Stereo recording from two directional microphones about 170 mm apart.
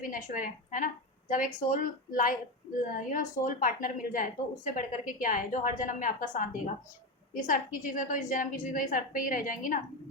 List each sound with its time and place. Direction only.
0.0 s a woman's voice: 55° left (ahead or behind)